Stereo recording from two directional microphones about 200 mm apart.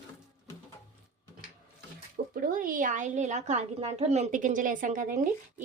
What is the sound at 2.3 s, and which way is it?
A woman's voice, 45° right (ahead or behind).